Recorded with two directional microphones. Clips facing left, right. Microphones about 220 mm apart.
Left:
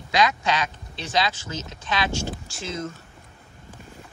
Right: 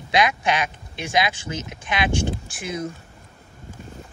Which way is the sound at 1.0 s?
15° right (ahead or behind).